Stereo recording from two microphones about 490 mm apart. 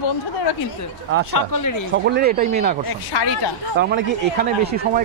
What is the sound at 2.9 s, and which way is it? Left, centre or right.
Speech, left.